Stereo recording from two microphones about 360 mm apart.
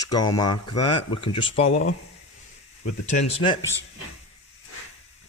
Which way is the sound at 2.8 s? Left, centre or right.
Centre.